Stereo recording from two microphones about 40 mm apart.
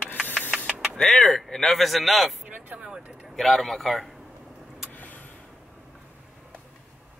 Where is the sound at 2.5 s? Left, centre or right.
Right.